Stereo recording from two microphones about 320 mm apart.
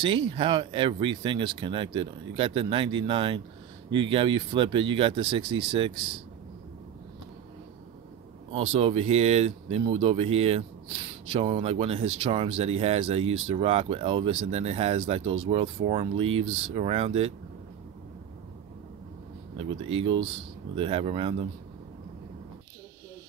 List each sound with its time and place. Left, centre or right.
0.0 s speech: centre
8.5 s speech: centre
19.5 s speech: centre